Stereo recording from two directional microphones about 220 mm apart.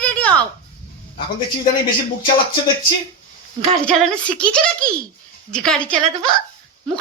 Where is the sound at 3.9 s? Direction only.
5° left (ahead or behind).